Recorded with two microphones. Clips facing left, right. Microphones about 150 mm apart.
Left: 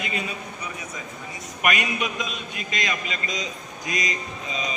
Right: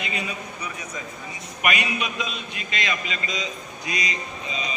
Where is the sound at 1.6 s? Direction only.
45° left (ahead or behind).